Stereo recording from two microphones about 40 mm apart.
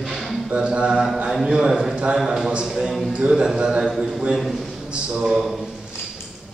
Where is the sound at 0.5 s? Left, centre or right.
Right.